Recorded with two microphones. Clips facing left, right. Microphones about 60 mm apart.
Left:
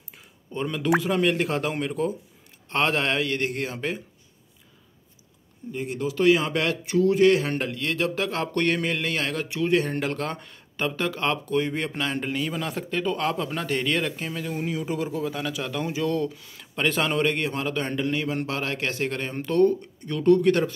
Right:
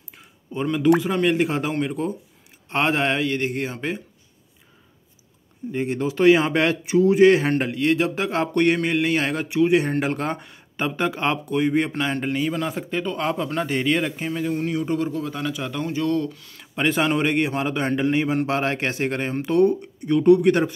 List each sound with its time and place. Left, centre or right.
0.1 s a sound: centre
1.0 s speech: centre
5.7 s speech: right; by 9.2 s centre
9.2 s speech: right
11.4 s speech: centre
14.5 s speech: centre
16.7 s speech: centre
18.6 s speech: right